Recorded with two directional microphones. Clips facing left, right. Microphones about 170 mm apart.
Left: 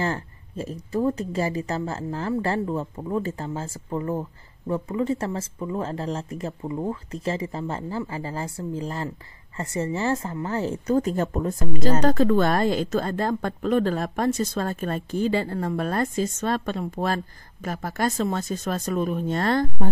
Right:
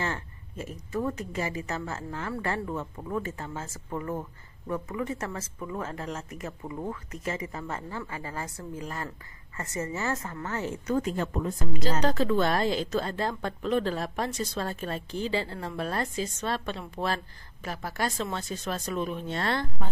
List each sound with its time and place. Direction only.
0.0 s a woman's voice: 35° left (ahead or behind)